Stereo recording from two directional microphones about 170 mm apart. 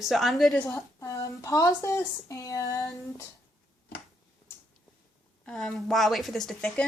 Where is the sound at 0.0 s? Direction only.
Centre (ahead or behind); by 3.2 s 20° left (ahead or behind).